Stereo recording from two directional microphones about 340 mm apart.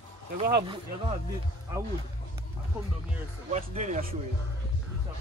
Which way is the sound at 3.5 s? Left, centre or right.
Right.